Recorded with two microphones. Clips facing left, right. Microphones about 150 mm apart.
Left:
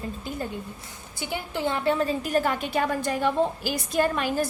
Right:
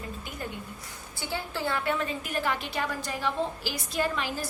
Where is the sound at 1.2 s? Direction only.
15° left (ahead or behind).